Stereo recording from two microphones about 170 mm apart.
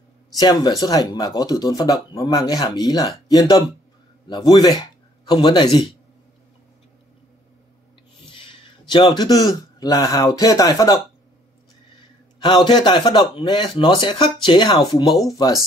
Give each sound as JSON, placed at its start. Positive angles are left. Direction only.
{"t": 0.4, "sound": "speech", "side_deg": 25}
{"t": 8.3, "sound": "a man's voice", "side_deg": 30}
{"t": 12.4, "sound": "speech", "side_deg": 25}